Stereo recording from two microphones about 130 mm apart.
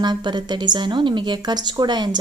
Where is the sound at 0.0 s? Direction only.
35° right (ahead or behind).